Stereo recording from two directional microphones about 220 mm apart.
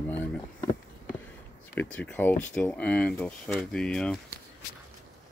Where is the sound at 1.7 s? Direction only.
5° left (ahead or behind).